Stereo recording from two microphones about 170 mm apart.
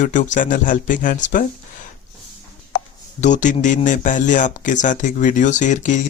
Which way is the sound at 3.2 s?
45° left (ahead or behind).